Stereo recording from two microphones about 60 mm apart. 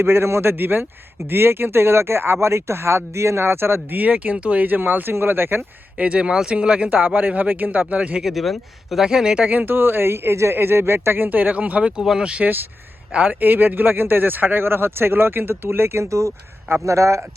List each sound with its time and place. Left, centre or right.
0.0 s speech: right
6.0 s speech: centre
8.2 s speech: centre
9.5 s a man's voice: right
13.4 s speech: right